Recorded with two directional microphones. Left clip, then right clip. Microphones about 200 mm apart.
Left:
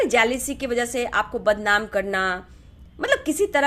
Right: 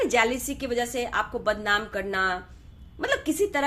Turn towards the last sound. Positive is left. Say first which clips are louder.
# left 4 dB
turn(degrees=30)  # may be behind; listen again after turning